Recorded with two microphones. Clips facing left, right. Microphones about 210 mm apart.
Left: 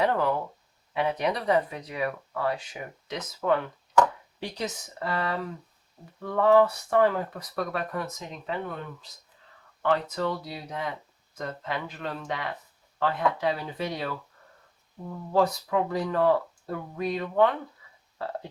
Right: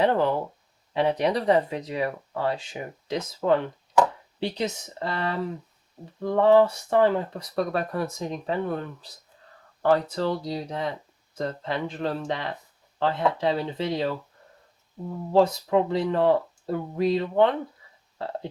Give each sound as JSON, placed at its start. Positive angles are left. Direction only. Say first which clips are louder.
{"t": 0.0, "sound": "speech", "louder": "right 3 dB", "side_deg": -30}
{"t": 15.3, "sound": "speech", "louder": "right 4 dB", "side_deg": -25}